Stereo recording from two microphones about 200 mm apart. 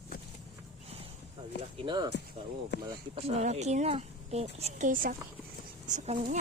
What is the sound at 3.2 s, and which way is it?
A woman's voice, 35° right (ahead or behind).